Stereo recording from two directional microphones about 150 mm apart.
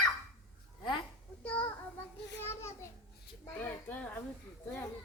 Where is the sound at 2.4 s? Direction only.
15° left (ahead or behind).